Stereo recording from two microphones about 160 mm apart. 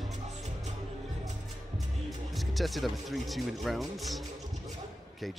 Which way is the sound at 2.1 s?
Centre (ahead or behind).